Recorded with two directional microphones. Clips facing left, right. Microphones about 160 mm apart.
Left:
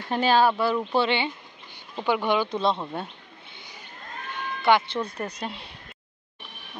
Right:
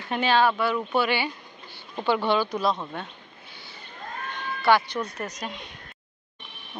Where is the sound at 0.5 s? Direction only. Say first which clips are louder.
Left 1 dB; 30° left (ahead or behind).